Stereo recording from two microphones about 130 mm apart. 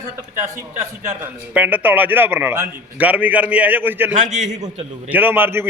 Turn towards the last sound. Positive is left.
turn(degrees=-15)  # may be behind; listen again after turning